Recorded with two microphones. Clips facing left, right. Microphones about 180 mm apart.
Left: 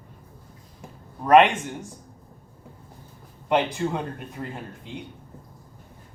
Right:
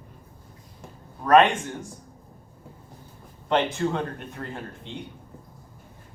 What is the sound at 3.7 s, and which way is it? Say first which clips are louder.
Speech: right 1 dB; 10° left (ahead or behind).